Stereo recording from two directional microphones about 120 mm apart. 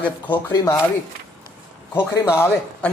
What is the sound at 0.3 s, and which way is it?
Speech, 35° left (ahead or behind).